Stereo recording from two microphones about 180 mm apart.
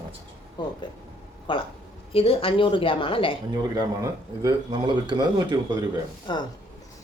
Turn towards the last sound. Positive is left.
turn(degrees=25)  # may be behind; listen again after turning